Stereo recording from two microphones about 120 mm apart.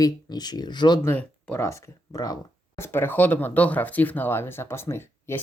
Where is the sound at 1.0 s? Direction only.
15° left (ahead or behind); by 2.8 s 30° left (ahead or behind).